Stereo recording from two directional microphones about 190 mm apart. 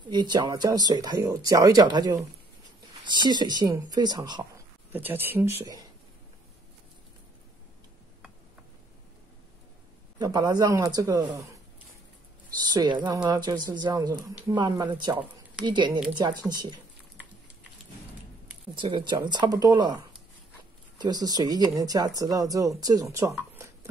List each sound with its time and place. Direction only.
0.1 s speech: 25° right (ahead or behind)
4.9 s speech: 10° right (ahead or behind)
10.1 s speech: 20° right (ahead or behind)
12.7 s speech: 25° right (ahead or behind)
18.8 s speech: 25° right (ahead or behind)
21.0 s speech: 20° right (ahead or behind)
23.3 s a sound: 10° right (ahead or behind)